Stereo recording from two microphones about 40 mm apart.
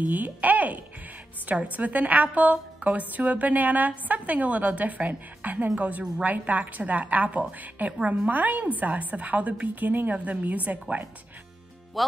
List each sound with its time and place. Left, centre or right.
0.0 s a woman's voice: right